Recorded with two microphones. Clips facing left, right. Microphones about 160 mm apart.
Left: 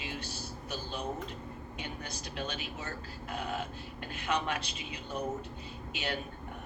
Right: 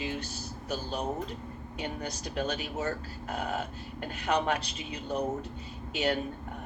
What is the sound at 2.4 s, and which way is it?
A man's voice, 40° right (ahead or behind).